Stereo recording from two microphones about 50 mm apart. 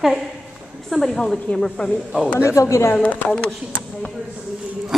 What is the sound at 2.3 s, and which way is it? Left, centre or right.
Speech, left.